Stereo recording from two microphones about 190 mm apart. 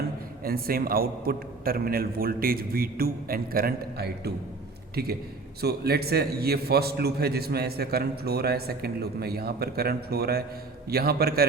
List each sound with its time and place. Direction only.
0.4 s a man's voice: 50° right (ahead or behind)